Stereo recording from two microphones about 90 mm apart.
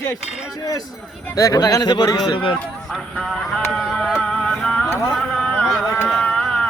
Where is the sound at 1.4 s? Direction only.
45° left (ahead or behind).